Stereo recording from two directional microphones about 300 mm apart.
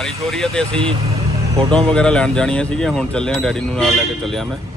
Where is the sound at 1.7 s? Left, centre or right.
Centre.